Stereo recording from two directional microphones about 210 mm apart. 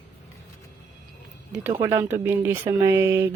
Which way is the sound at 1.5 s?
10° right (ahead or behind).